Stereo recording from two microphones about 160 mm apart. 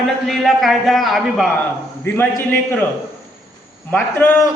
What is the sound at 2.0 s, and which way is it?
Speech, 15° left (ahead or behind).